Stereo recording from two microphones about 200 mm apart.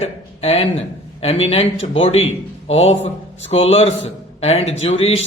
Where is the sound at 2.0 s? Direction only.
75° left (ahead or behind).